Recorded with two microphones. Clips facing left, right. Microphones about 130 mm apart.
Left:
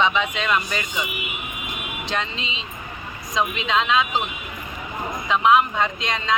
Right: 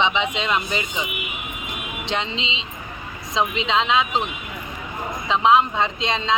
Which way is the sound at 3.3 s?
20° right (ahead or behind).